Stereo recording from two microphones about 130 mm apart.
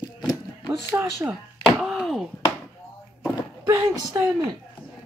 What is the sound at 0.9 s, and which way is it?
Speech, 20° right (ahead or behind).